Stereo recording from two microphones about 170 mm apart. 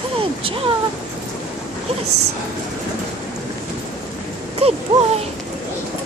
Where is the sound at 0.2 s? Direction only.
30° right (ahead or behind).